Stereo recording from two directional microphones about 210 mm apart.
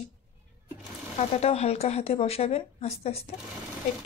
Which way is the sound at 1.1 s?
30° left (ahead or behind).